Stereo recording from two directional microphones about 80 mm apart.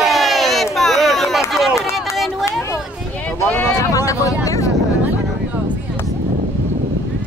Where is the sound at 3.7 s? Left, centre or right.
Left.